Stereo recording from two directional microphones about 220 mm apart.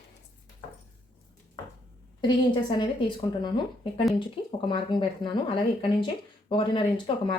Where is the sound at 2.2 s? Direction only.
20° left (ahead or behind).